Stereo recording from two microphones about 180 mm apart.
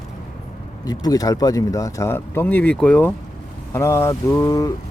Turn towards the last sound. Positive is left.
turn(degrees=20)  # may be behind; listen again after turning